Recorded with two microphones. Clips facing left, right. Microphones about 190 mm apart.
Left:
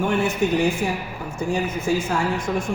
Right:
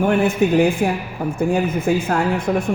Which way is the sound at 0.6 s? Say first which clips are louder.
Right 5 dB; 55° right (ahead or behind).